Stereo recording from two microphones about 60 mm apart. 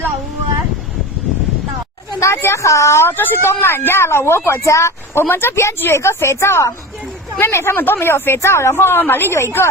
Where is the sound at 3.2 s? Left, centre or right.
Left.